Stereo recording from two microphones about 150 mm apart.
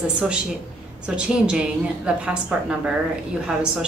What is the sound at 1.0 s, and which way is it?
A woman's voice, 5° right (ahead or behind).